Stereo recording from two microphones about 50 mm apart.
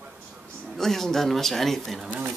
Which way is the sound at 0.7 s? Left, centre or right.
Centre.